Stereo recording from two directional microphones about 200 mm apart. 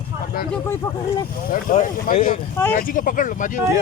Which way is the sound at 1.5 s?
40° left (ahead or behind).